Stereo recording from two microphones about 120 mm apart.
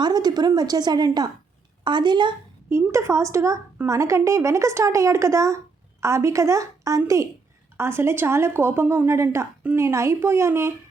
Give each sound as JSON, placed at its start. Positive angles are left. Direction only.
{"t": 0.0, "sound": "a woman's voice", "side_deg": -35}
{"t": 2.6, "sound": "a woman's voice", "side_deg": -20}